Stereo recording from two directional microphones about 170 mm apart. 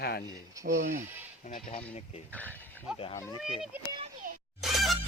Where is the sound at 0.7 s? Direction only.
50° right (ahead or behind).